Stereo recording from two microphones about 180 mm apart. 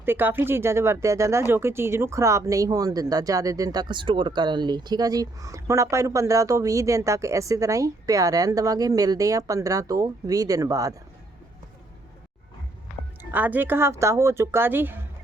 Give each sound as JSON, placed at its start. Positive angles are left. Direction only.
{"t": 0.0, "sound": "speech", "side_deg": -10}
{"t": 13.3, "sound": "speech", "side_deg": -10}